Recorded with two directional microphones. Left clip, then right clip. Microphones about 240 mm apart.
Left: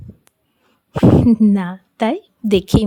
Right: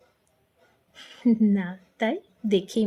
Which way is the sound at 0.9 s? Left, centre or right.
Left.